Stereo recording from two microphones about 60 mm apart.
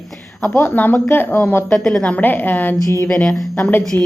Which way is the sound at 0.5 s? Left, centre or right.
Left.